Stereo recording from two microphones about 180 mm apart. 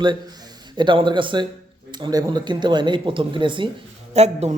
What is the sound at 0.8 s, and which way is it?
Speech, 25° right (ahead or behind).